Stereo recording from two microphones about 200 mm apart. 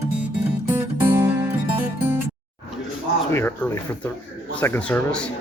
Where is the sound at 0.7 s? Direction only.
10° right (ahead or behind).